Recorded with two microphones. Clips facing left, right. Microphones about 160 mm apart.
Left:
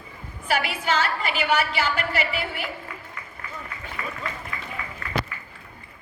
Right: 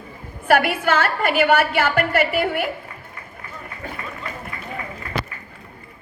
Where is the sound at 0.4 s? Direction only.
55° right (ahead or behind).